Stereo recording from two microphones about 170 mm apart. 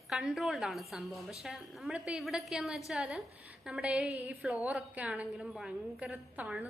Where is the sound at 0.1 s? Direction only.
Centre (ahead or behind).